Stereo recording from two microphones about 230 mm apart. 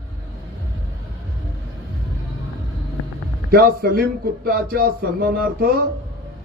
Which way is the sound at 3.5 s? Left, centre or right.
Right.